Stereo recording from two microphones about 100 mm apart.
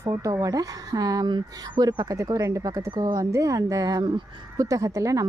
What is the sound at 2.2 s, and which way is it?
Speech, 30° right (ahead or behind).